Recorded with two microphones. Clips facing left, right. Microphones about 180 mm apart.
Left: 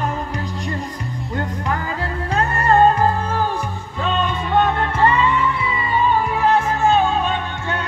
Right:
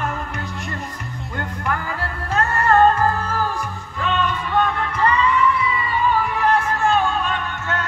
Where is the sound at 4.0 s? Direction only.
30° left (ahead or behind).